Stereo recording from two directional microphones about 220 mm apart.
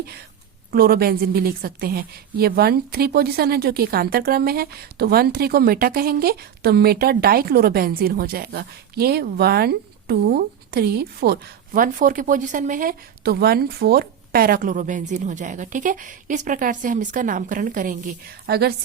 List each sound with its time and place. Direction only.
0.7 s a woman's voice: 45° right (ahead or behind)